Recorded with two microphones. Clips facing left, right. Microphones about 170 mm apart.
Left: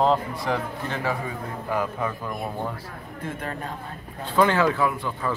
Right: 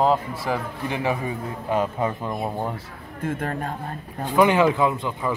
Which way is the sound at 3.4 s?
50° right (ahead or behind).